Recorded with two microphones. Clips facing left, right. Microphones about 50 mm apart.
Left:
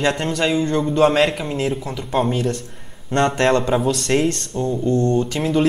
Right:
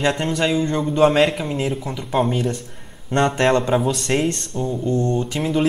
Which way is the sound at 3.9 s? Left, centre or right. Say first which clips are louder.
Left 2 dB; centre.